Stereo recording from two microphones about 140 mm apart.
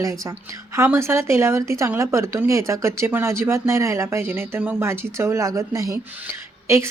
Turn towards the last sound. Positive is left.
turn(degrees=-20)  # may be behind; listen again after turning